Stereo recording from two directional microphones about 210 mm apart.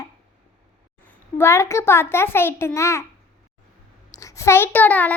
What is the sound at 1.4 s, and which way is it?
A child's voice, 10° left (ahead or behind).